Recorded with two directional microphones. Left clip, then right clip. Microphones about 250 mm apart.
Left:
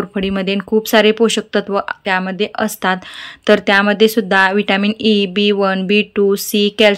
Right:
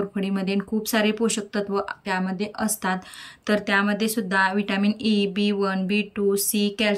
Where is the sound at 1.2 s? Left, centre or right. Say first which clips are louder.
Left 11 dB; left.